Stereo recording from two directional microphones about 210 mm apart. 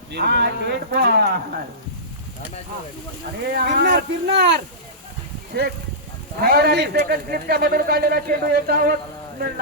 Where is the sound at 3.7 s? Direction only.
50° right (ahead or behind).